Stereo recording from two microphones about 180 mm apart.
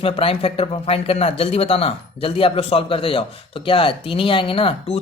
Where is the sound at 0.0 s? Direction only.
30° left (ahead or behind).